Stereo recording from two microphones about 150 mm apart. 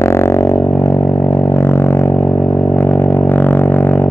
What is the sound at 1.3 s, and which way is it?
Didgeridoo, 20° left (ahead or behind).